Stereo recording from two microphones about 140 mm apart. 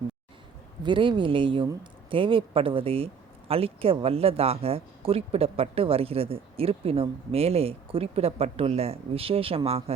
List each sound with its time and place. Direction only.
0.8 s speech: 35° right (ahead or behind)